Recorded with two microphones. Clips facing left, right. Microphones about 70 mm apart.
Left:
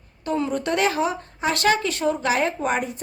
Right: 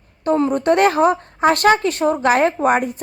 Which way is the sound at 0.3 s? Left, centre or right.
Right.